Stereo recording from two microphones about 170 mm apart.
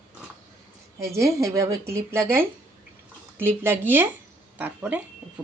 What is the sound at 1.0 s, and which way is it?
A woman's voice, 15° right (ahead or behind).